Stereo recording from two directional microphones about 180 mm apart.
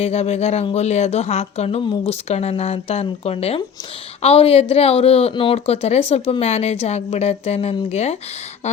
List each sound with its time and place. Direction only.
0.0 s speech: 35° left (ahead or behind)